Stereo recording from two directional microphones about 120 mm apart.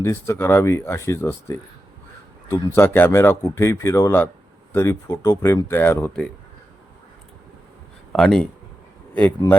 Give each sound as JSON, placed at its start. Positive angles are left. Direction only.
{"t": 0.0, "sound": "speech", "side_deg": 20}
{"t": 2.6, "sound": "speech", "side_deg": 20}
{"t": 8.1, "sound": "speech", "side_deg": 5}